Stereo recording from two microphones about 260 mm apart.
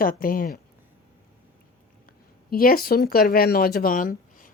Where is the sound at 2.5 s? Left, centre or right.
Left.